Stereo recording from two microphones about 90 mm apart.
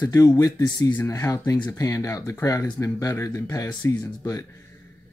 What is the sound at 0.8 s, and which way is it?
Speech, 20° left (ahead or behind).